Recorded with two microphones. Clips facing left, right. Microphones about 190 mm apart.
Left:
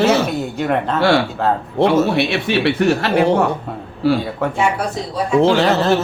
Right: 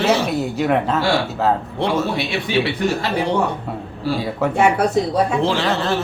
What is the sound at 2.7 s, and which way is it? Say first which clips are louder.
Speech: left 5 dB; 70° left (ahead or behind).